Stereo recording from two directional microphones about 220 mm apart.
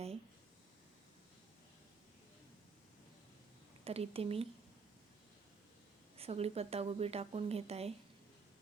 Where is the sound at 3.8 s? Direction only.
25° right (ahead or behind).